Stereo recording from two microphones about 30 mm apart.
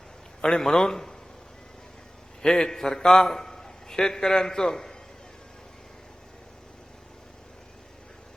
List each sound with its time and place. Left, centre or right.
0.4 s a man's voice: left
2.5 s a man's voice: centre